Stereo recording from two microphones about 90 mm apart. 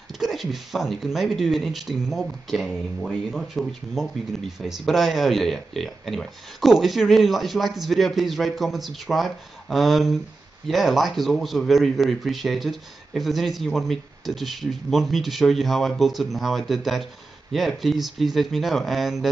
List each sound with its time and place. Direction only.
0.2 s speech: centre (ahead or behind)